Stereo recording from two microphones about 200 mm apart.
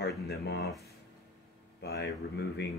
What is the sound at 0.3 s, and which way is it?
Speech, 55° left (ahead or behind).